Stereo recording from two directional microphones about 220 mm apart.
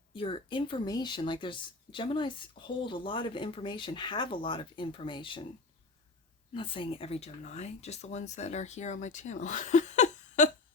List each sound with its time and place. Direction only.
0.1 s speech: 25° left (ahead or behind)
6.5 s speech: 25° left (ahead or behind)